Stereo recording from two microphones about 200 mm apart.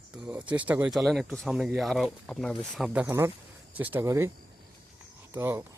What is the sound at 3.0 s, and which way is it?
Speech, 15° right (ahead or behind).